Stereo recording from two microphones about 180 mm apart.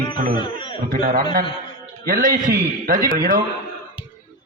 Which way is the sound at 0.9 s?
55° right (ahead or behind).